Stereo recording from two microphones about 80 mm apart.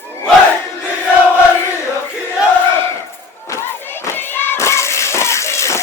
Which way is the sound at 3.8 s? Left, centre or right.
Left.